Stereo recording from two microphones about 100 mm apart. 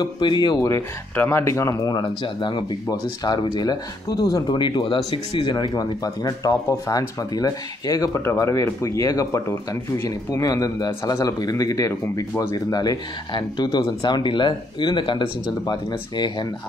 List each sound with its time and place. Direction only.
0.0 s speech: 50° left (ahead or behind)
1.1 s speech: 20° left (ahead or behind); by 2.0 s 40° left (ahead or behind)
2.2 s speech: 55° left (ahead or behind)
8.2 s speech: 25° left (ahead or behind); by 16.4 s 45° left (ahead or behind)